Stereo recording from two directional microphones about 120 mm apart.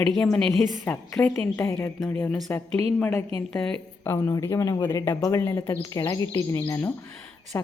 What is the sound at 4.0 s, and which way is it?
A woman's voice, 25° left (ahead or behind).